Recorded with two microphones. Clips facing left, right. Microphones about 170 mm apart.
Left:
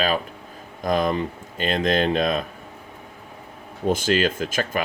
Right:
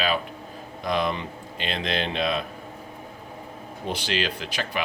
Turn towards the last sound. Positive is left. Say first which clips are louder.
# left 5 dB
turn(degrees=45)  # may be behind; listen again after turning